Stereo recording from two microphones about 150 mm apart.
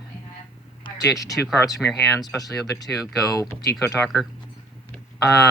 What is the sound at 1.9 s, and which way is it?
Speech, 15° left (ahead or behind).